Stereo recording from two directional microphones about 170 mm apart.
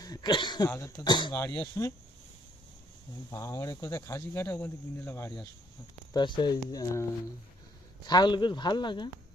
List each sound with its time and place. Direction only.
0.0 s speech: 25° left (ahead or behind)
0.7 s speech: 15° left (ahead or behind)
3.2 s speech: 15° left (ahead or behind)
6.1 s speech: 25° left (ahead or behind)